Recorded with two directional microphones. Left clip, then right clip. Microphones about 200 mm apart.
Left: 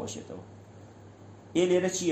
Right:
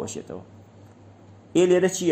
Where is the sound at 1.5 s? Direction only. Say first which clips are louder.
Right 6 dB; 40° right (ahead or behind).